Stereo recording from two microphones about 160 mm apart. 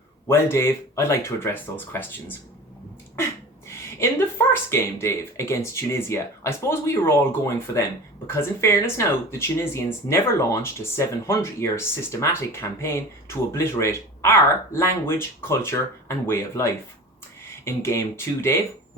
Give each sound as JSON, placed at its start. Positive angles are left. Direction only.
{"t": 0.3, "sound": "speech", "side_deg": 15}
{"t": 3.7, "sound": "speech", "side_deg": 15}